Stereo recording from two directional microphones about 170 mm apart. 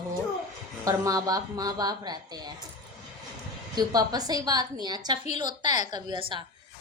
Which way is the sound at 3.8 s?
25° right (ahead or behind).